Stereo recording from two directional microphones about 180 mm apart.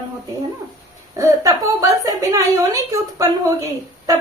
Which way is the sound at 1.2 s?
20° right (ahead or behind).